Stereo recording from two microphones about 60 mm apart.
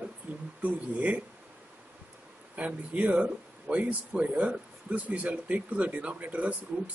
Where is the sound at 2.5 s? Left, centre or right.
Right.